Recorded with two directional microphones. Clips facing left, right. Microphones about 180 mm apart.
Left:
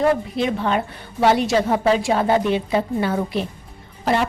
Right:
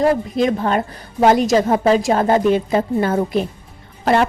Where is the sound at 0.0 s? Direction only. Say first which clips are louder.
Right 3 dB; 40° right (ahead or behind).